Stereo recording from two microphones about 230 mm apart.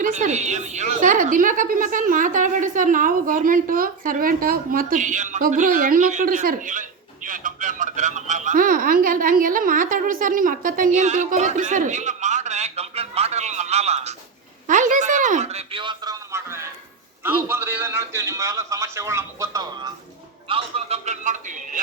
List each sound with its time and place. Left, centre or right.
0.0 s a woman's voice: right; by 19.9 s centre
20.5 s a woman's voice: right